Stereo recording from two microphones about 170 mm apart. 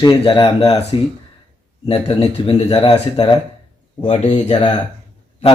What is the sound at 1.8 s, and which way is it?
Speech, 35° left (ahead or behind).